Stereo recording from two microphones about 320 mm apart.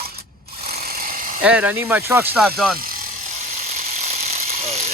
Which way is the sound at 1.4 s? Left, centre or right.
Centre.